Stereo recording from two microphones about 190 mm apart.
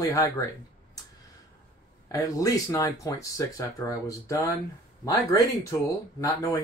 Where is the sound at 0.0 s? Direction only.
15° left (ahead or behind).